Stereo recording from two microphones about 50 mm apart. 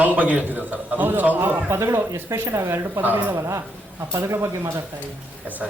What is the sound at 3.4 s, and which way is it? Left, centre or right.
Speech, right.